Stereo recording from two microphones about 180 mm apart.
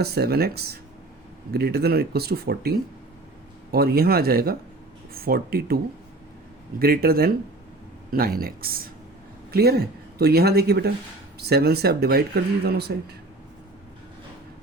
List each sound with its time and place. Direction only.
0.0 s speech: 60° right (ahead or behind)